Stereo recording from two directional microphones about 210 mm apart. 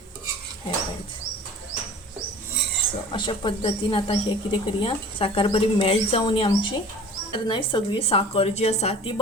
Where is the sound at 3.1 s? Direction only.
20° left (ahead or behind).